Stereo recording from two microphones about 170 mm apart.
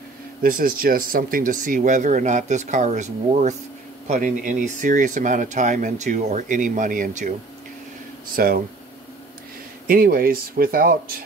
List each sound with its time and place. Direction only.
0.4 s speech: 60° right (ahead or behind)
9.8 s speech: 60° right (ahead or behind)